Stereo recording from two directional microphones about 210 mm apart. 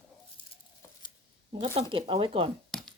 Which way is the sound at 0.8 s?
15° left (ahead or behind).